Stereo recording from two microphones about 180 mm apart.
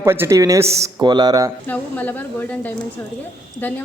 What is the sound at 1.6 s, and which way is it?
A woman's voice, 10° left (ahead or behind).